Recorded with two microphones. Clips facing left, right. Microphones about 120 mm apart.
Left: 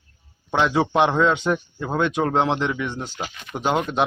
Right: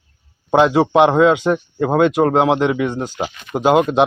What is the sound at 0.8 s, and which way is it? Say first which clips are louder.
Speech: right 6 dB; 30° right (ahead or behind).